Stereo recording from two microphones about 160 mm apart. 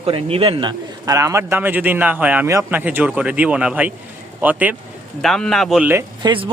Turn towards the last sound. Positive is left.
turn(degrees=-30)  # may be behind; listen again after turning